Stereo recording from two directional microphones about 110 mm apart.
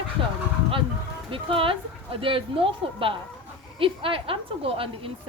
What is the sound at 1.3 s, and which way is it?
A woman's voice, 55° right (ahead or behind).